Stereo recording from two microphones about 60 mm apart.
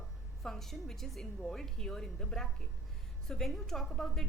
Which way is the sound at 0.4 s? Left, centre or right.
Centre.